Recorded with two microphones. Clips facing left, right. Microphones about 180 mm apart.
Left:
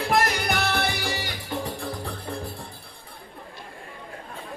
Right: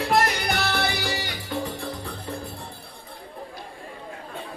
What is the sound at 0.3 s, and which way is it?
Music, 50° left (ahead or behind).